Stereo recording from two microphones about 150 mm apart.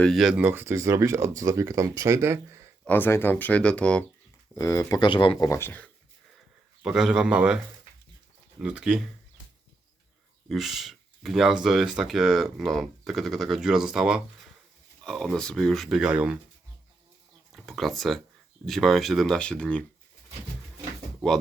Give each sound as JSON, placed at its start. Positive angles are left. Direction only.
{"t": 0.0, "sound": "speech", "side_deg": 0}
{"t": 2.8, "sound": "speech", "side_deg": 15}
{"t": 4.5, "sound": "speech", "side_deg": 20}
{"t": 5.5, "sound": "speech", "side_deg": 15}
{"t": 6.8, "sound": "speech", "side_deg": -5}
{"t": 10.5, "sound": "speech", "side_deg": 0}
{"t": 17.5, "sound": "speech", "side_deg": 0}